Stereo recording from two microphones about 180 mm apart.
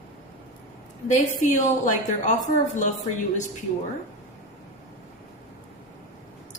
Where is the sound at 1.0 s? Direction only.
40° left (ahead or behind).